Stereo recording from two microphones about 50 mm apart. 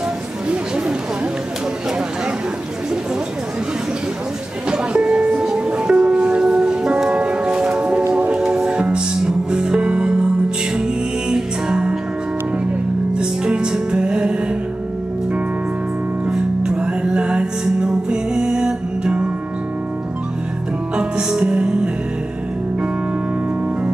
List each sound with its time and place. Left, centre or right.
4.6 s music: centre
13.1 s music: centre
16.3 s music: centre
20.9 s music: centre